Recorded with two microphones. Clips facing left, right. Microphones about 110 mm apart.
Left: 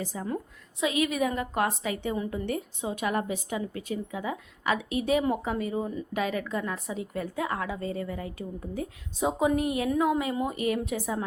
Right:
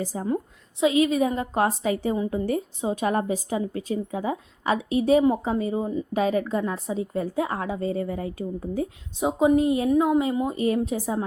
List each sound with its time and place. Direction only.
0.0 s a woman's voice: 35° right (ahead or behind); by 6.1 s 20° right (ahead or behind)
6.1 s a woman's voice: 35° right (ahead or behind)